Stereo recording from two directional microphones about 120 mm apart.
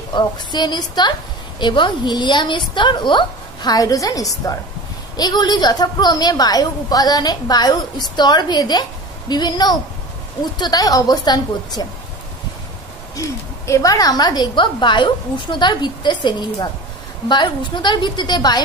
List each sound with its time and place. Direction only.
0.1 s a woman's voice: 35° left (ahead or behind)
13.7 s a woman's voice: 30° left (ahead or behind)